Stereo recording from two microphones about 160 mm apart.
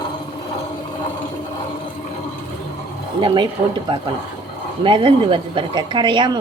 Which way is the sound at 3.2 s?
30° right (ahead or behind).